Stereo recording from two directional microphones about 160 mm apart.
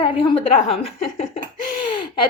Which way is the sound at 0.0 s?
30° left (ahead or behind).